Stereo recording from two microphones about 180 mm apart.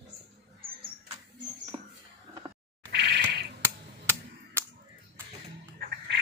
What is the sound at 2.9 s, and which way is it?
Cat, 65° right (ahead or behind).